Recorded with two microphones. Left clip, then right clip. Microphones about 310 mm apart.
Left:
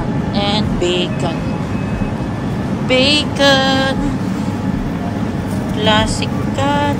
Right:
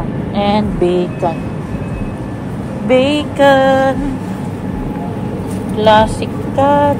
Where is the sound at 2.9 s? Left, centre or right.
Centre.